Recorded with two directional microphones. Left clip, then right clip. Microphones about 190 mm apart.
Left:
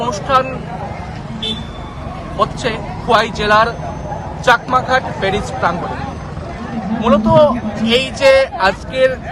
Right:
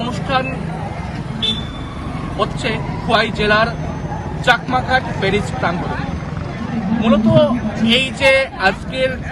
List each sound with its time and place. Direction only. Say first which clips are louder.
0.0 s speech: left 5 dB; 15° left (ahead or behind)
2.4 s speech: left 3 dB; 15° left (ahead or behind)
7.0 s speech: left 4 dB; 15° left (ahead or behind)